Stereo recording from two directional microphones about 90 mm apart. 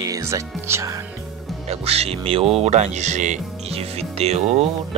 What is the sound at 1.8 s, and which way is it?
Speech, 90° right.